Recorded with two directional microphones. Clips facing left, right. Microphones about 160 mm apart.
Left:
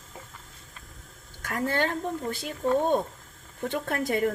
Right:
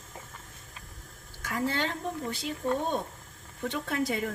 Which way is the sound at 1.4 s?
50° left (ahead or behind).